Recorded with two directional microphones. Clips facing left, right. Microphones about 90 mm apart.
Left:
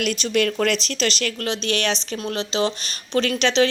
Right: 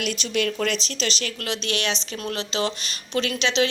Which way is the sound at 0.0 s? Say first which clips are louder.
Left 4 dB; 50° left (ahead or behind).